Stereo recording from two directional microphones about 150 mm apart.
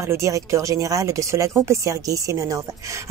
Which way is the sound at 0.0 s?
20° right (ahead or behind).